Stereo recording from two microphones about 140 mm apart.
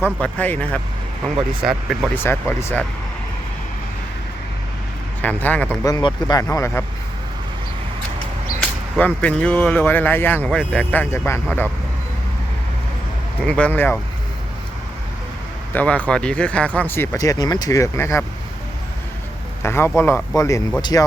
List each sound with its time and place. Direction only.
0.0 s speech: 10° left (ahead or behind)
1.2 s speech: 5° right (ahead or behind)
2.1 s speech: 15° left (ahead or behind)
5.2 s speech: 10° left (ahead or behind)
5.8 s speech: 30° left (ahead or behind)
9.0 s speech: 10° left (ahead or behind)
13.4 s speech: 10° left (ahead or behind)
15.7 s speech: 10° left (ahead or behind)
19.6 s speech: 20° left (ahead or behind)